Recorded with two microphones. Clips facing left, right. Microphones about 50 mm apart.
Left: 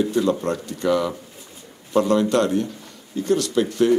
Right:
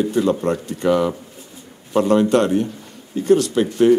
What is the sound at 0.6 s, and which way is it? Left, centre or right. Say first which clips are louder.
Speech: right 3 dB; right.